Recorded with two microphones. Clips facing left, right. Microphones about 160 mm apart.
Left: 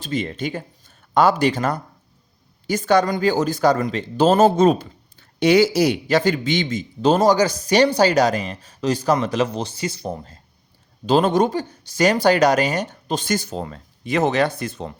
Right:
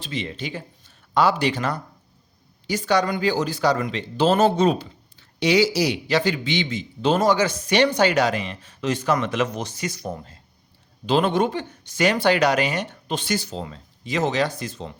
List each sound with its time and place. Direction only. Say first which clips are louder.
0.0 s speech: left 5 dB; 45° left (ahead or behind); by 10.3 s 30° left (ahead or behind)
11.0 s speech: left 3 dB; 40° left (ahead or behind); by 14.9 s 60° left (ahead or behind)